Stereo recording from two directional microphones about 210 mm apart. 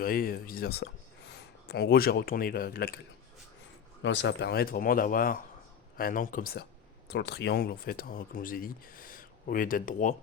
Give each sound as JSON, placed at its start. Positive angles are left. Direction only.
{"t": 0.0, "sound": "speech", "side_deg": 45}
{"t": 4.0, "sound": "speech", "side_deg": 60}